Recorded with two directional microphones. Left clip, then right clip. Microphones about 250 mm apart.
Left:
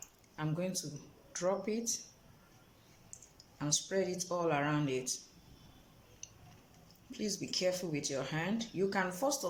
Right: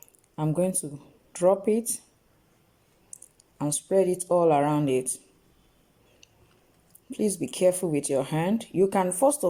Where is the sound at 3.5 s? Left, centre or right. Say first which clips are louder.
Right 10 dB; right.